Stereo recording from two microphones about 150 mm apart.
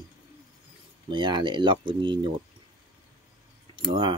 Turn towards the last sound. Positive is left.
turn(degrees=-30)  # may be behind; listen again after turning